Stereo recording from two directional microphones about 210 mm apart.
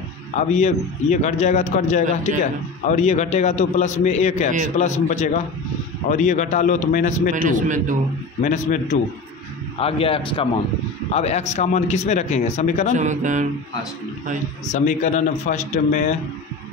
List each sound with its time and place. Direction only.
0.4 s a man's voice: 35° left (ahead or behind)
7.4 s mantra: 40° right (ahead or behind)
8.4 s a man's voice: 40° left (ahead or behind)
9.8 s a man's voice: 25° left (ahead or behind)
12.9 s mantra: 35° right (ahead or behind)
14.7 s a man's voice: 35° left (ahead or behind)